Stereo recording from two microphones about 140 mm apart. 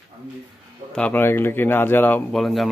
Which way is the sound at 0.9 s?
10° left (ahead or behind).